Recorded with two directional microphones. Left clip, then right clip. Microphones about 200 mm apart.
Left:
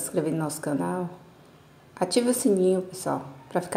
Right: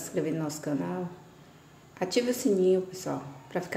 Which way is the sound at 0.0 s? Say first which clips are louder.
Left 4 dB; 25° left (ahead or behind).